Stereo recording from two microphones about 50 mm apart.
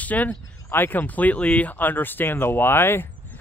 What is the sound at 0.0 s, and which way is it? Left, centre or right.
Speech, left.